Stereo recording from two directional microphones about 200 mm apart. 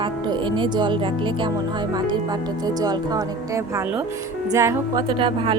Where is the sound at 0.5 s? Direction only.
25° right (ahead or behind).